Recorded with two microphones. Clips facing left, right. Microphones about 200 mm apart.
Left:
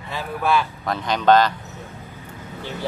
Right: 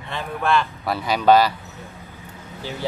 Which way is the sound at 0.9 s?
10° right (ahead or behind).